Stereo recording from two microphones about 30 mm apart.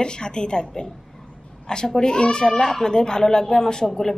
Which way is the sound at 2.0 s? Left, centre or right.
Left.